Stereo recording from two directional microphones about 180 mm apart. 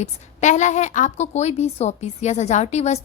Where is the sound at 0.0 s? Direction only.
40° left (ahead or behind).